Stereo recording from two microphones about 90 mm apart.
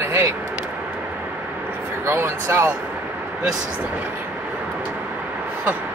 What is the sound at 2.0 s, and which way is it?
Speech, 30° right (ahead or behind).